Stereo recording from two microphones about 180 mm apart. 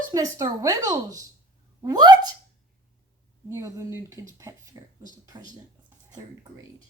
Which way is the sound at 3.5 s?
15° right (ahead or behind).